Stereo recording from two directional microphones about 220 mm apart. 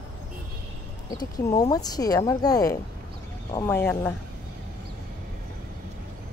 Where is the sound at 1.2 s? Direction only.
15° left (ahead or behind).